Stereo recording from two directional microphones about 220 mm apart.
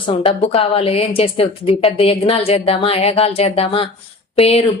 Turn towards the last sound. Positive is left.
turn(degrees=25)  # may be behind; listen again after turning